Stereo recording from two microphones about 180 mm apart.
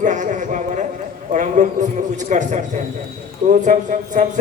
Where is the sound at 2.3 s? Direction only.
40° right (ahead or behind).